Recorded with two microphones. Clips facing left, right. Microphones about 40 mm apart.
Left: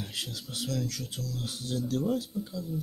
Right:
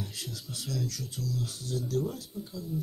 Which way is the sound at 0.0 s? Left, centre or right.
Left.